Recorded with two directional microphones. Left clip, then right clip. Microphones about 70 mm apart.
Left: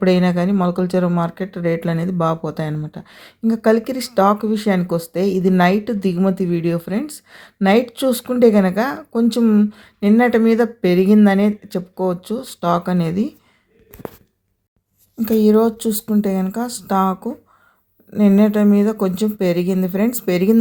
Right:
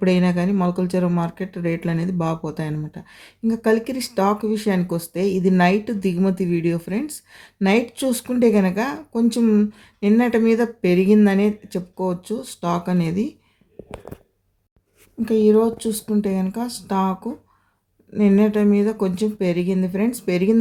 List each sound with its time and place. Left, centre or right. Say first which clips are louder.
0.0 s speech: left 4 dB; left
15.2 s speech: left 2 dB; left
18.2 s speech: left 2 dB; left